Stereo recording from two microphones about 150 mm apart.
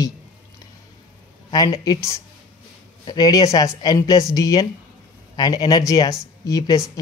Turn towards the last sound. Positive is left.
turn(degrees=25)  # may be behind; listen again after turning